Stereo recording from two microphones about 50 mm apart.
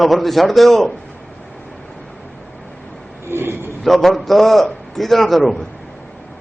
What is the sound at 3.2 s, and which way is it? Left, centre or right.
Speech, right.